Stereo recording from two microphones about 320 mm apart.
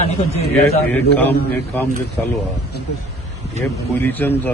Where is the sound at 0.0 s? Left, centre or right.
Centre.